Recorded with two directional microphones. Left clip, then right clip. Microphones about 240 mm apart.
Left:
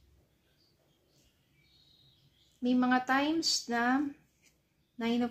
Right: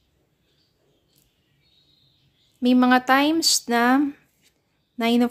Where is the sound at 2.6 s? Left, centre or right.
Right.